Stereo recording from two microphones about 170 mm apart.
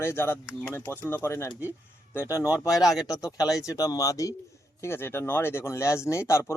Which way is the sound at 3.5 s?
20° left (ahead or behind).